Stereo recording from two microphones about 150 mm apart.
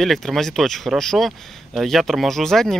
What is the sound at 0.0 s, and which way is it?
Speech, centre (ahead or behind).